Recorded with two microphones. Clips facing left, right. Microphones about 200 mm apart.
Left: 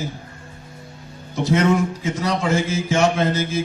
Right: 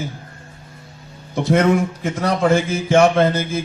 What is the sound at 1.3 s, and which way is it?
A man's voice, 55° right (ahead or behind).